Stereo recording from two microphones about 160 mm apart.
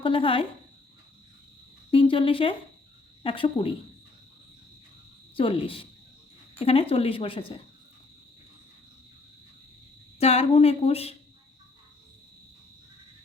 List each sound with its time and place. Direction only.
0.0 s a woman's voice: 35° left (ahead or behind)
1.9 s a woman's voice: 35° left (ahead or behind)
5.3 s a woman's voice: 35° left (ahead or behind)
10.2 s a woman's voice: 40° left (ahead or behind)